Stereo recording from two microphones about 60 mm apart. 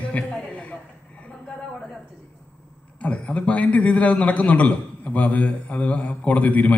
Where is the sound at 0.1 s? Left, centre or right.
Left.